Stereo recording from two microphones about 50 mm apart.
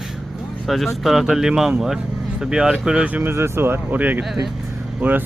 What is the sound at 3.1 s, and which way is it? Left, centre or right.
Speech, right.